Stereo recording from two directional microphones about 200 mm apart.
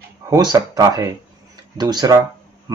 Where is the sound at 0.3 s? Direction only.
20° right (ahead or behind).